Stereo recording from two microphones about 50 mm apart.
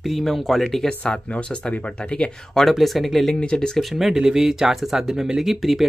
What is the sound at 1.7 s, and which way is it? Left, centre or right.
Speech, left.